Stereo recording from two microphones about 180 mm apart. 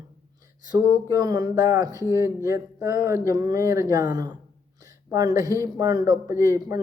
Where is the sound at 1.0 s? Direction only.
20° right (ahead or behind).